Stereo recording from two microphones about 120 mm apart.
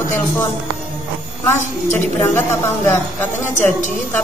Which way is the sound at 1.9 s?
15° left (ahead or behind).